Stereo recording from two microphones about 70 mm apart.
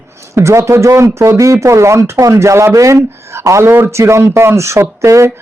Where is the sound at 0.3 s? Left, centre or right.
Right.